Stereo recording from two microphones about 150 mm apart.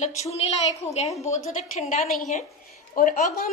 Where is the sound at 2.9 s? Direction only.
65° left (ahead or behind).